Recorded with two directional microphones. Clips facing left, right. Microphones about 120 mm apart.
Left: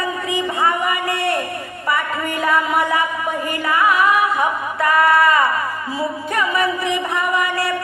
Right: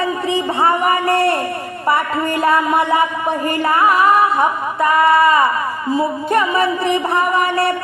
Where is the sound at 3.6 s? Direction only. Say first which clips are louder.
Right 3 dB; 35° right (ahead or behind).